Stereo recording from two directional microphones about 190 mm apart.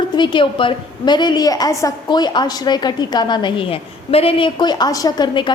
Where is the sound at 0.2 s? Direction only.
25° left (ahead or behind).